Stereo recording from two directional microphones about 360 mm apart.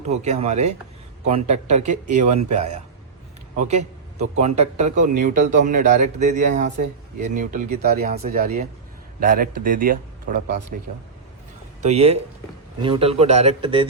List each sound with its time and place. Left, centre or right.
0.1 s speech: centre
11.8 s speech: centre